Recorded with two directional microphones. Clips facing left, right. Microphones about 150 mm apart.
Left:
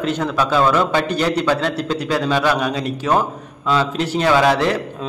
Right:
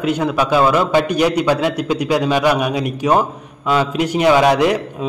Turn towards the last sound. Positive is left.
turn(degrees=-15)  # may be behind; listen again after turning